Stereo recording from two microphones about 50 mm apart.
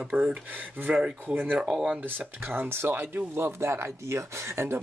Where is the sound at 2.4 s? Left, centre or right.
Right.